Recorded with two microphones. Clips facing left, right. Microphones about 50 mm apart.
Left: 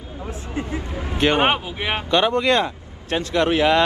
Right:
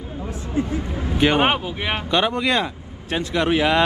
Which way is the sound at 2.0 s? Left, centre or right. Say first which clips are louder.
Left 3 dB; centre.